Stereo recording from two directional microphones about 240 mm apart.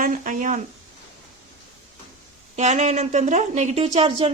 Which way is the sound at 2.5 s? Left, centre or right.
Right.